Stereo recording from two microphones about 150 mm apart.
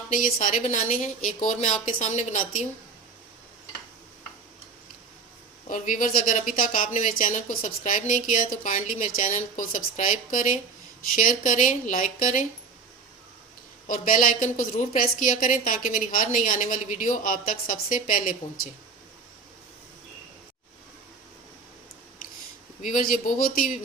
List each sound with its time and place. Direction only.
0.1 s speech: 65° left (ahead or behind)
5.6 s speech: 60° left (ahead or behind)
13.8 s speech: 65° left (ahead or behind)
22.8 s speech: 65° left (ahead or behind)